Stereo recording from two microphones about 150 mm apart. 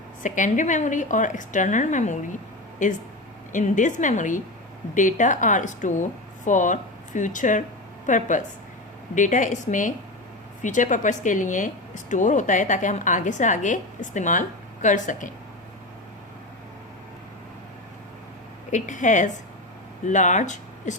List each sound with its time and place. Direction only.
0.2 s a woman's voice: 60° left (ahead or behind)
18.7 s a woman's voice: 55° left (ahead or behind)